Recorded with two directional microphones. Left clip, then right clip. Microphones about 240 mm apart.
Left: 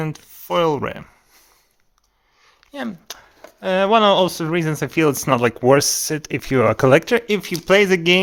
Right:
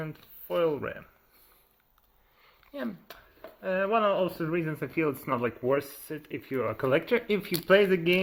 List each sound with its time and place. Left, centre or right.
0.0 s speech: left
2.7 s speech: left